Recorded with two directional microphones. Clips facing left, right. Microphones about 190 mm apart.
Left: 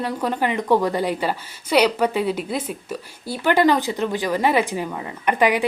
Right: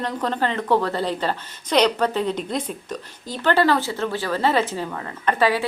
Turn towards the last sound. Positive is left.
turn(degrees=15)  # may be behind; listen again after turning